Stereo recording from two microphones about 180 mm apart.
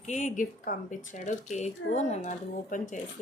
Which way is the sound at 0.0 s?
40° left (ahead or behind).